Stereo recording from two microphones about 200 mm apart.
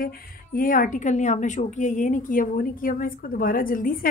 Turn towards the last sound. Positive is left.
turn(degrees=45)  # may be behind; listen again after turning